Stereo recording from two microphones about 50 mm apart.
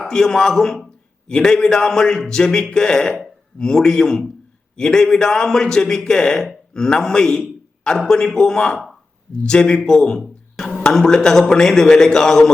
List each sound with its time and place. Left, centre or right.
0.1 s a man's voice: centre
10.2 s music: centre
10.8 s a man's voice: centre